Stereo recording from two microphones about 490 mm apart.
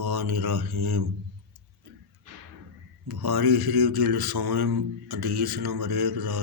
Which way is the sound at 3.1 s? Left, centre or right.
Right.